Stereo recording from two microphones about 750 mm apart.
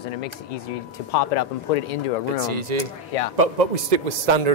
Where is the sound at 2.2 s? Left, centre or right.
Right.